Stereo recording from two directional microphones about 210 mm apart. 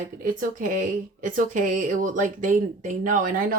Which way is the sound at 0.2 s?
40° right (ahead or behind).